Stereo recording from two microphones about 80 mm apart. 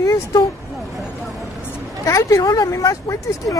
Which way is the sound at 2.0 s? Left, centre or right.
Left.